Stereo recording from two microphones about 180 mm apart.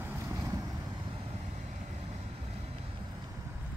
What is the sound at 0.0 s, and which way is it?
Vehicle, 15° right (ahead or behind).